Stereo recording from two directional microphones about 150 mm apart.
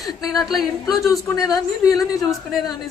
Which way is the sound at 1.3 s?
25° left (ahead or behind).